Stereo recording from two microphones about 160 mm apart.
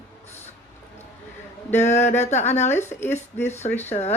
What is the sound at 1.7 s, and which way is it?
Speech, 45° left (ahead or behind).